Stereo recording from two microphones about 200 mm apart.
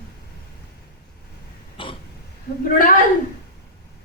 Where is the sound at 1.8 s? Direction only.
25° left (ahead or behind).